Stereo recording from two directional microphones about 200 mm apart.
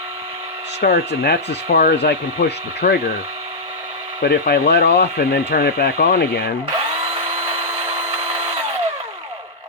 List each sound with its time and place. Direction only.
0.8 s speech: 50° left (ahead or behind)
4.2 s speech: 50° left (ahead or behind)